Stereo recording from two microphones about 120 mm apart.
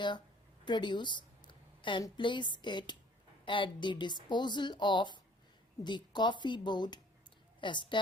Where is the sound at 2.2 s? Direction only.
40° left (ahead or behind).